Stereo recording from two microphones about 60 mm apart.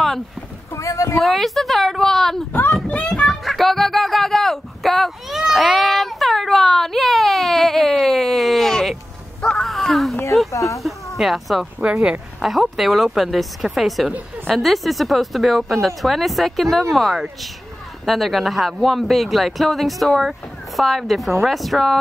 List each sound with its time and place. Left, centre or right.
0.7 s a sound: left
1.2 s speech: centre
3.1 s a sound: centre
10.5 s speech: left
11.1 s speech: centre
11.8 s speech: centre
12.4 s speech: centre